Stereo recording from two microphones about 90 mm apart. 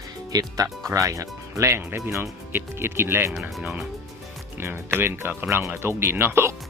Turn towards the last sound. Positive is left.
turn(degrees=-30)  # may be behind; listen again after turning